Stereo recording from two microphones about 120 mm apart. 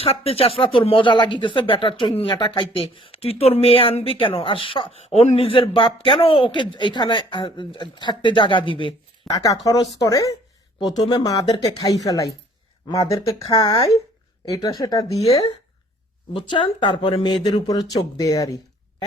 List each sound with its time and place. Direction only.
0.0 s speech: 55° left (ahead or behind)
9.3 s speech: 30° left (ahead or behind)
10.8 s speech: 40° left (ahead or behind)
13.4 s speech: 40° left (ahead or behind)
16.3 s speech: 45° left (ahead or behind)